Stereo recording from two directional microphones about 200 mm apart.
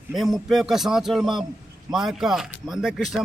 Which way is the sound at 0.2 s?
Centre (ahead or behind).